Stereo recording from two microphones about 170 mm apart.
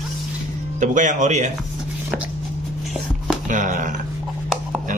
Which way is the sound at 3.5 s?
50° right (ahead or behind).